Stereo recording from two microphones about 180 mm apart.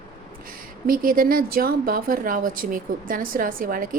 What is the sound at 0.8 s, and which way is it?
Speech, 50° right (ahead or behind).